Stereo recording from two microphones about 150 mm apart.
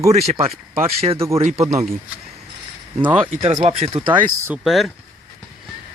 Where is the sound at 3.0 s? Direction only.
40° right (ahead or behind).